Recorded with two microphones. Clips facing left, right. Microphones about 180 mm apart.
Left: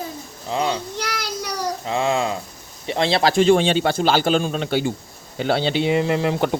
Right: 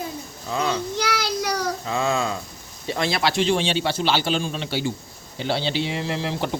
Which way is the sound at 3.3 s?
50° left (ahead or behind).